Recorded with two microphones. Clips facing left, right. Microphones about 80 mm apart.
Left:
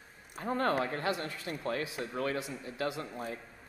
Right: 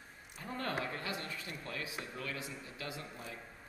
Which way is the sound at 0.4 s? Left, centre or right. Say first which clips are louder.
Left 8 dB; left.